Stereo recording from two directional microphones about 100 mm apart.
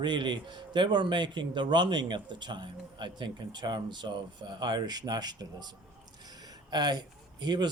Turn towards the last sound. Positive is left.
turn(degrees=-45)  # may be behind; listen again after turning